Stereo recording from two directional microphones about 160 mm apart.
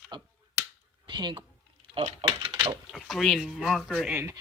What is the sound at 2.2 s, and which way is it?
Speech, 25° right (ahead or behind).